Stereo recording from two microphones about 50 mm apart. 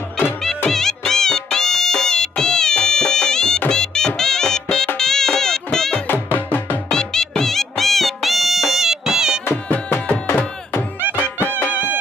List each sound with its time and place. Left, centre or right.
0.7 s music: centre
6.0 s music: left
6.9 s music: centre
11.7 s music: right